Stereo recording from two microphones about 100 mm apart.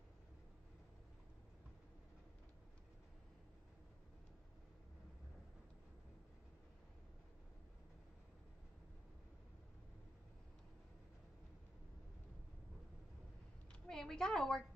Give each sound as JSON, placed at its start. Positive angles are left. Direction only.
{"t": 13.8, "sound": "a woman's voice", "side_deg": 5}